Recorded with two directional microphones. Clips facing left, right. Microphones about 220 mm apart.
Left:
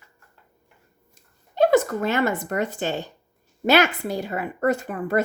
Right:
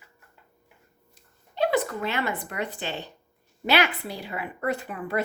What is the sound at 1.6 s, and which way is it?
A woman's voice, 45° left (ahead or behind).